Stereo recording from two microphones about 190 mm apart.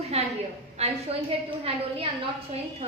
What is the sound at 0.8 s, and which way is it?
Speech, 35° right (ahead or behind).